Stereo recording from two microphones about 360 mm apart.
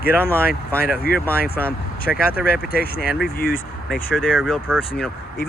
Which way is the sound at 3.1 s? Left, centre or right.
Centre.